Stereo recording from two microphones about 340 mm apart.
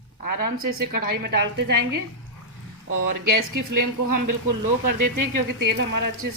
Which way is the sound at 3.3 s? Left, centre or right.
Right.